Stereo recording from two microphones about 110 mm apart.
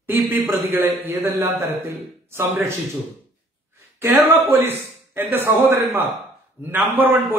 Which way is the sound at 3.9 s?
20° right (ahead or behind).